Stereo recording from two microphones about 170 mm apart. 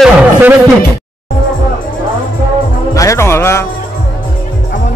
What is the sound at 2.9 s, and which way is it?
Speech, 20° left (ahead or behind).